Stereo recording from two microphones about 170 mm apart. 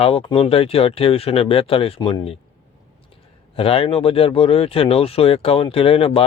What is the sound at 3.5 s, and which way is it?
Speech, 35° left (ahead or behind).